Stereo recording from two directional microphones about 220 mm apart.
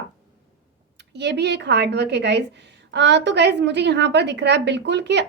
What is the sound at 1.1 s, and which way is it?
A woman's voice, 50° right (ahead or behind).